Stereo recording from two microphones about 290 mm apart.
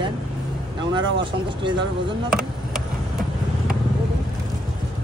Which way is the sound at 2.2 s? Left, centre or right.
Centre.